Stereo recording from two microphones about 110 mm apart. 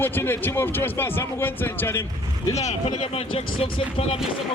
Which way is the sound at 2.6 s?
80° left.